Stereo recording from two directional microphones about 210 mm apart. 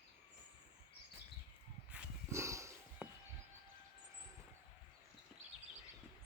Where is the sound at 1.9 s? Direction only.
15° right (ahead or behind).